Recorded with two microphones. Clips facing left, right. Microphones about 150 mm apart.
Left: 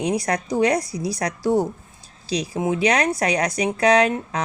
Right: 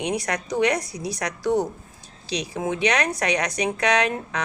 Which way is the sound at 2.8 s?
35° left (ahead or behind).